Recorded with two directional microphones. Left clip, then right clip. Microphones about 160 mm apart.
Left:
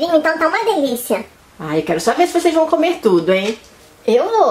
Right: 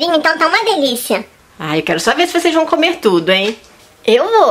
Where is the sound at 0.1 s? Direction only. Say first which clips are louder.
Right 3 dB; 30° right (ahead or behind).